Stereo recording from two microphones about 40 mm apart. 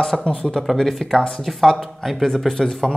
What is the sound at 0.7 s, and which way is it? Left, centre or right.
Speech, centre.